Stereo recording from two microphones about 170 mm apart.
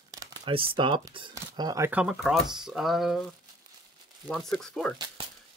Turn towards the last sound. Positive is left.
turn(degrees=5)  # may be behind; listen again after turning